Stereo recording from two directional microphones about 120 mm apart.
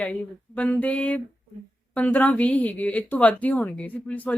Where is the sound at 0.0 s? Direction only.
10° left (ahead or behind).